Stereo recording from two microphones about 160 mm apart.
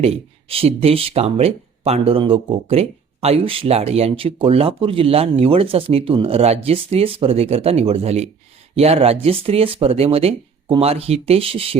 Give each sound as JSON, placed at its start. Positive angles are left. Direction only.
{"t": 0.0, "sound": "speech", "side_deg": -40}